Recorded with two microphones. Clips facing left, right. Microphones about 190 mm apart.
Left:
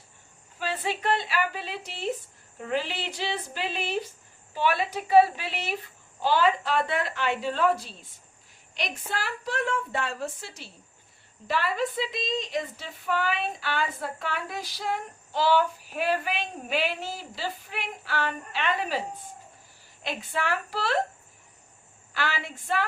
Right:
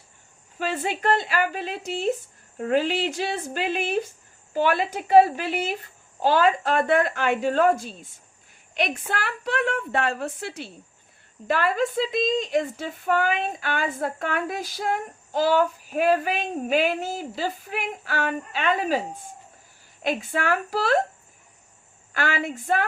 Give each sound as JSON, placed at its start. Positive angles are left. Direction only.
{"t": 0.6, "sound": "a woman's voice", "side_deg": -45}
{"t": 20.1, "sound": "speech", "side_deg": -50}
{"t": 22.1, "sound": "speech", "side_deg": -50}